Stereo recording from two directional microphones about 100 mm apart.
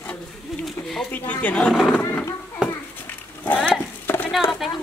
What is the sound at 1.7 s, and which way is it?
Speech, centre (ahead or behind).